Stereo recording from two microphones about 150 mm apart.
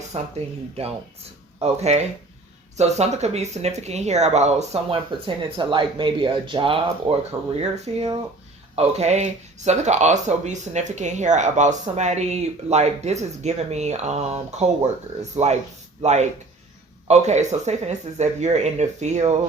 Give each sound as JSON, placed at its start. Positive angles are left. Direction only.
{"t": 0.1, "sound": "speech", "side_deg": -45}
{"t": 1.6, "sound": "speech", "side_deg": -45}
{"t": 4.9, "sound": "speech", "side_deg": -35}